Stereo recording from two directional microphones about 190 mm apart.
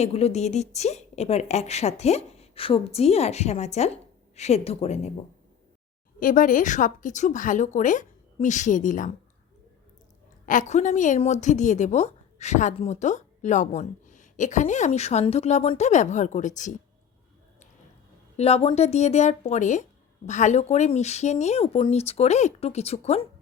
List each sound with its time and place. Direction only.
0.0 s a woman's voice: 35° left (ahead or behind)
6.1 s a woman's voice: 45° left (ahead or behind)
10.4 s a woman's voice: 40° left (ahead or behind)
18.3 s a woman's voice: 35° left (ahead or behind)